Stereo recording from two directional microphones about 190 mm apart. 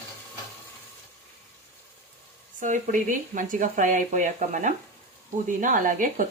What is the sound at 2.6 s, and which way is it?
Speech, 40° right (ahead or behind).